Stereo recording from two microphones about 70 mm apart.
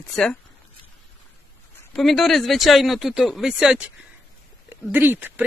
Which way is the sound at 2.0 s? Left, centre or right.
Centre.